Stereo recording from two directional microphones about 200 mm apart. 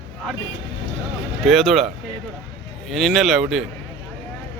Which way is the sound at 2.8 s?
Centre (ahead or behind).